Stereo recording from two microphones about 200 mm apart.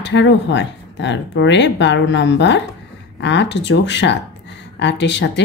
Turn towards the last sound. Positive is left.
turn(degrees=60)  # may be behind; listen again after turning